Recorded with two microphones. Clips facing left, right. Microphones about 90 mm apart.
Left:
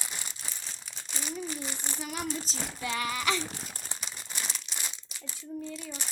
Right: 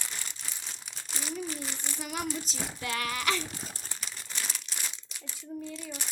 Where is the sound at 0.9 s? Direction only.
Centre (ahead or behind).